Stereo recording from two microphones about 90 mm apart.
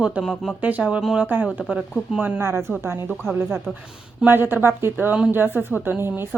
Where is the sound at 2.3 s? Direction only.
30° right (ahead or behind).